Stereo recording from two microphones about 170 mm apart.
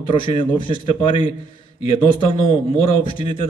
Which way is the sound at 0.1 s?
30° left (ahead or behind).